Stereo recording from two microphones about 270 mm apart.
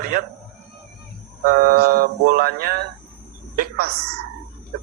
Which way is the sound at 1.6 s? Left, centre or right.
Right.